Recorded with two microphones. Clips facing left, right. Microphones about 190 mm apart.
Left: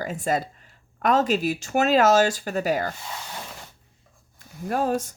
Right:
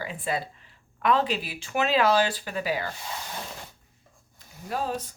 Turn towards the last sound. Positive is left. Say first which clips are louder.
# left 6 dB
turn(degrees=45)  # may be behind; listen again after turning